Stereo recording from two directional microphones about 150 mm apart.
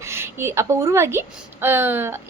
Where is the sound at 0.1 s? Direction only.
15° right (ahead or behind).